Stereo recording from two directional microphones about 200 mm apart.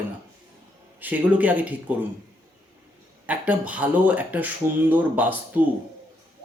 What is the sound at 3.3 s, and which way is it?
A man's voice, 5° right (ahead or behind).